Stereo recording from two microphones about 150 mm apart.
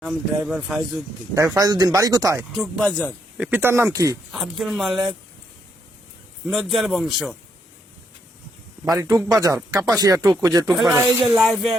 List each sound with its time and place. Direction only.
0.0 s speech: 5° right (ahead or behind)
1.4 s speech: 20° right (ahead or behind)
2.6 s speech: centre (ahead or behind); by 4.2 s 20° right (ahead or behind)
4.3 s speech: centre (ahead or behind)
6.5 s speech: centre (ahead or behind)
9.0 s speech: 20° right (ahead or behind)
11.2 s speech: centre (ahead or behind)